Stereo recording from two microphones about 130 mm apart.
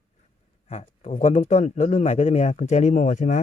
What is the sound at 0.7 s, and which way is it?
A man's voice, 60° left (ahead or behind).